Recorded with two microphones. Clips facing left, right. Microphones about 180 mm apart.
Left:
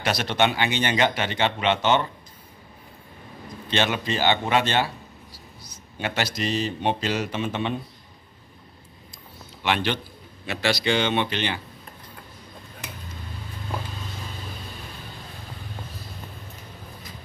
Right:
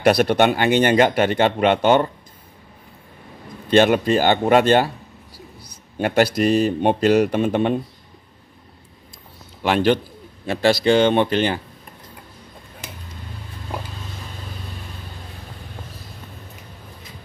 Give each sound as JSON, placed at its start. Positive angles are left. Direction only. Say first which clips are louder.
{"t": 0.0, "sound": "speech", "louder": "right 8 dB", "side_deg": -55}
{"t": 3.7, "sound": "speech", "louder": "right 10 dB", "side_deg": -50}
{"t": 5.9, "sound": "speech", "louder": "right 10 dB", "side_deg": -50}
{"t": 9.6, "sound": "a man's voice", "louder": "right 8 dB", "side_deg": -40}